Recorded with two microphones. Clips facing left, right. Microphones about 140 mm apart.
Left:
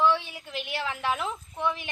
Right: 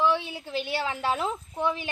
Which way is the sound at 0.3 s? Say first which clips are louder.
Right 5 dB; 30° right (ahead or behind).